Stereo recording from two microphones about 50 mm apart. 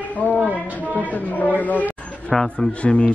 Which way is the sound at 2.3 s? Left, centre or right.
Centre.